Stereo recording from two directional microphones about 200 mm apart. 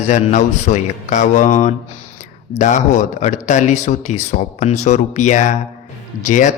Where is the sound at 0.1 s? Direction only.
35° left (ahead or behind).